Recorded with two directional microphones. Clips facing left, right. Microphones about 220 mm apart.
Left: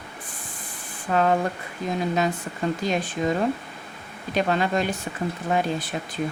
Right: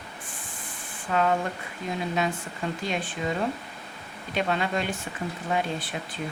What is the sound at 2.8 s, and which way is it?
Speech, 40° left (ahead or behind).